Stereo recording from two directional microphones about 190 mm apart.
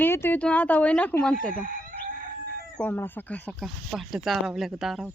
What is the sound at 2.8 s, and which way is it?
Speech, 10° left (ahead or behind).